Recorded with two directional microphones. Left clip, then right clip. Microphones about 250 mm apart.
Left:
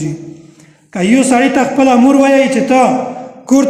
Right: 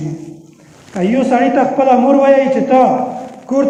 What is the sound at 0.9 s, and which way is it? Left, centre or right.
A man's voice, left.